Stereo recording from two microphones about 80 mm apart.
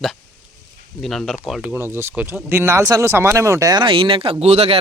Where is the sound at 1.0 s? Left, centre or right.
Centre.